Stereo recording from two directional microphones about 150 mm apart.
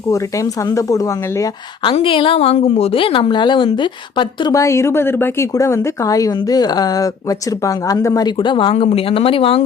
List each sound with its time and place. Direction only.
0.1 s speech: 20° left (ahead or behind)
1.8 s a woman's voice: 35° left (ahead or behind)